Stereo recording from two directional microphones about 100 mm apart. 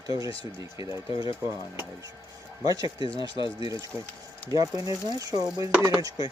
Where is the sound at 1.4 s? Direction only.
30° right (ahead or behind).